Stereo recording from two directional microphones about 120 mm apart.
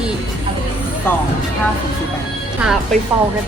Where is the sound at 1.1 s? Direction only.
15° left (ahead or behind).